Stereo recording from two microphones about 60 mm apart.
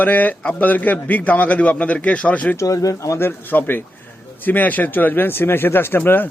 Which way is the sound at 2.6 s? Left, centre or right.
Left.